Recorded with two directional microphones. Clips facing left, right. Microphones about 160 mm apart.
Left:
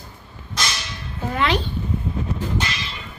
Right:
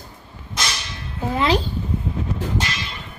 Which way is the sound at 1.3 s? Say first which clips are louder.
Right 2 dB; 35° right (ahead or behind).